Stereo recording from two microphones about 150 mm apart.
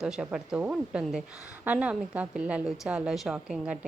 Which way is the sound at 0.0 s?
5° right (ahead or behind).